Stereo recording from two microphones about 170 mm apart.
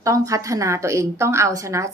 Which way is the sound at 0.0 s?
20° right (ahead or behind).